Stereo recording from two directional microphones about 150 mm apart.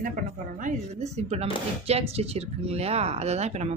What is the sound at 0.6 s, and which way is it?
Speech, 55° right (ahead or behind).